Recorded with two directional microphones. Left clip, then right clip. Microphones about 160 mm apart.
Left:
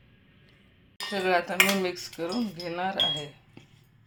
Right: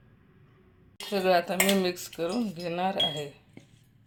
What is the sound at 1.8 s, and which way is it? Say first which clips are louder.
Speech: right 1 dB; 15° right (ahead or behind).